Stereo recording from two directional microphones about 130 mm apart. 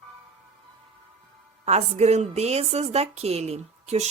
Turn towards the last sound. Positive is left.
turn(degrees=-60)  # may be behind; listen again after turning